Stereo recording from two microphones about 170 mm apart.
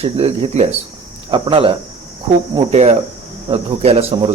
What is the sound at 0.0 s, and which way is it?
Speech, 40° right (ahead or behind).